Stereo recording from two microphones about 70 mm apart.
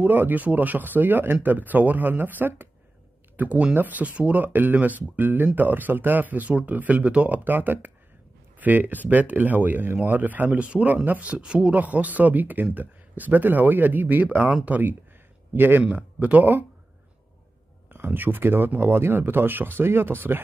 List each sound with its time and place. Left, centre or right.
0.0 s speech: right
15.8 s speech: centre
17.8 s speech: right